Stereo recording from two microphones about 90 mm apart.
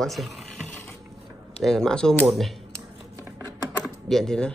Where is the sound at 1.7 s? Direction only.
5° left (ahead or behind).